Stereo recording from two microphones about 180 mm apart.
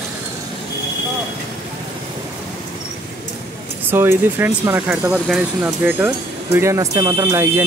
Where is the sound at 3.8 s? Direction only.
10° right (ahead or behind).